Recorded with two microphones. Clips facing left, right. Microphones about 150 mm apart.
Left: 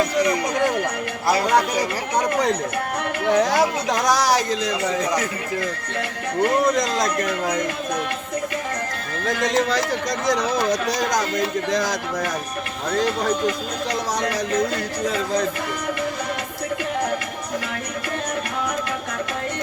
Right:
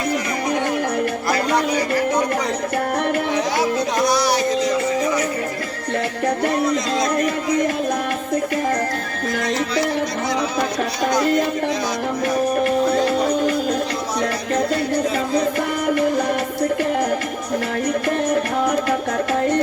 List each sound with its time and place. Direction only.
4.0 s speech: 90° left